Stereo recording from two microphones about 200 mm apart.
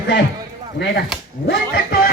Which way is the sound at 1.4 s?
50° left (ahead or behind).